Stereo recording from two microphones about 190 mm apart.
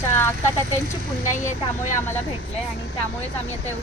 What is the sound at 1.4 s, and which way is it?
Speech, 40° left (ahead or behind).